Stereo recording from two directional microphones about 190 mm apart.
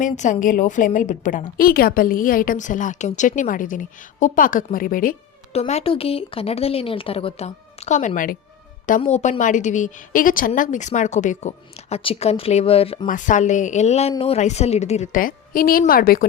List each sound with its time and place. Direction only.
0.0 s a woman's voice: 40° left (ahead or behind)
5.5 s a woman's voice: 35° left (ahead or behind)
13.1 s a woman's voice: 40° left (ahead or behind)